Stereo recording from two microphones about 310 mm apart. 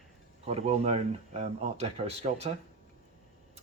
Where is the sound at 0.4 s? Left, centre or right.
Centre.